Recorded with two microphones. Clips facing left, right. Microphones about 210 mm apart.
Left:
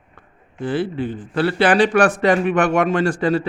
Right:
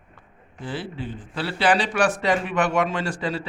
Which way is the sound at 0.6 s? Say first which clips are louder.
Left 10 dB; 55° left (ahead or behind).